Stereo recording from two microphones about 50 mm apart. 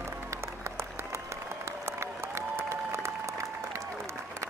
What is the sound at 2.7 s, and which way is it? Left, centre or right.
Applause, right.